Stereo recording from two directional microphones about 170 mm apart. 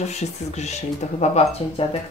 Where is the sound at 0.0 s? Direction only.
40° left (ahead or behind).